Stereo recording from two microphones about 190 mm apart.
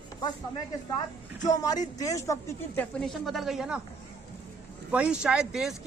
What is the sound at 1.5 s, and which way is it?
Speech, 20° left (ahead or behind).